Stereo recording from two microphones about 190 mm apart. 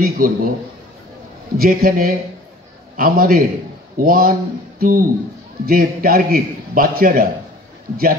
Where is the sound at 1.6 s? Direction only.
50° right (ahead or behind).